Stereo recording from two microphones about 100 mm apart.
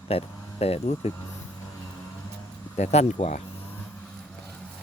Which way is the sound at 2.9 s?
90° left.